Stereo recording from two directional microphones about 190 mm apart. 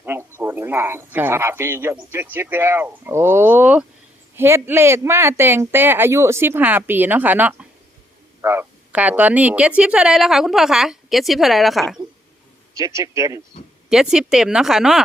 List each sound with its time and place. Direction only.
0.0 s speech: 10° right (ahead or behind)
12.7 s speech: 15° right (ahead or behind)
13.9 s speech: 5° right (ahead or behind)